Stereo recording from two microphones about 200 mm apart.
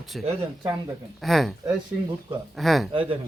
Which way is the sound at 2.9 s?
25° right (ahead or behind).